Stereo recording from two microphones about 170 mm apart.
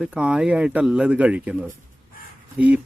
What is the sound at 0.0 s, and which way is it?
Speech, 5° right (ahead or behind).